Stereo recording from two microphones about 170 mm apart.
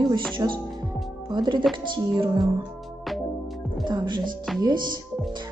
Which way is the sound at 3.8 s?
25° right (ahead or behind).